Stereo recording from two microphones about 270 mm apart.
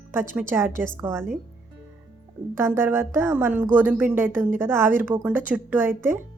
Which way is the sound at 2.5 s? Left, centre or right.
Centre.